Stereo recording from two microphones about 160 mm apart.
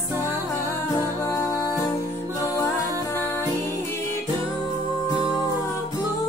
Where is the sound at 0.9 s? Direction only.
20° left (ahead or behind).